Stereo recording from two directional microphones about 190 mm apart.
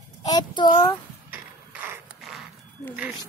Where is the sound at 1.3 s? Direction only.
10° right (ahead or behind).